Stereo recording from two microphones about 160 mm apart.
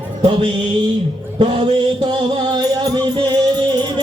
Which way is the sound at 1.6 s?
30° right (ahead or behind).